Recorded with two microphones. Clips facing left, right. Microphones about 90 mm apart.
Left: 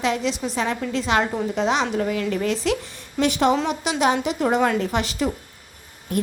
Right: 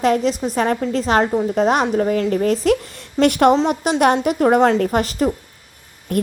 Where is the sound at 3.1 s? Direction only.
60° right (ahead or behind).